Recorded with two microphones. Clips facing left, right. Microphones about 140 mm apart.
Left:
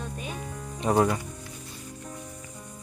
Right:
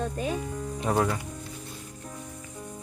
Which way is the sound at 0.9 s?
15° left (ahead or behind).